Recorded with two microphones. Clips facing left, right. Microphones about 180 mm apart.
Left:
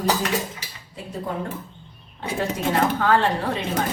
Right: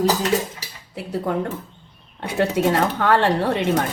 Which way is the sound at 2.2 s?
70° right (ahead or behind).